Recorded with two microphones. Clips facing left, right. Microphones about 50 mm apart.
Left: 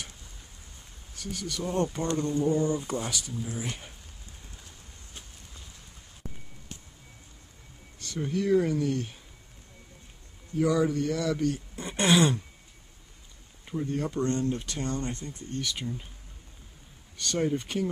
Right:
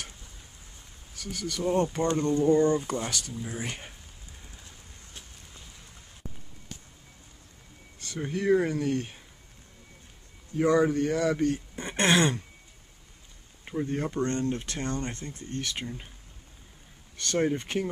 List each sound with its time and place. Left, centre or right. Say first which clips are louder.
1.1 s speech: right 1 dB; centre
2.0 s speech: right 3 dB; right
2.5 s throat clearing: right 4 dB; right
2.8 s speech: right 1 dB; centre
3.6 s speech: right 1 dB; right
8.0 s speech: left 1 dB; right
10.6 s speech: right 2 dB; right
12.0 s throat clearing: even; right
14.0 s speech: even; right
14.6 s speech: even; right
15.8 s speech: left 2 dB; right
17.2 s speech: right 1 dB; right